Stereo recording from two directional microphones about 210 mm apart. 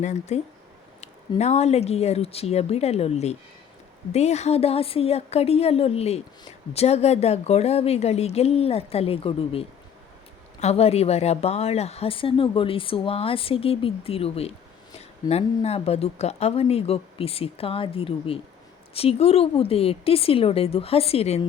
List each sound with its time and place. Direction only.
0.0 s speech: 35° left (ahead or behind)